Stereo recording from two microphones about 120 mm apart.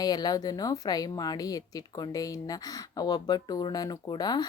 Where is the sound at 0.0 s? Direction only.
35° left (ahead or behind).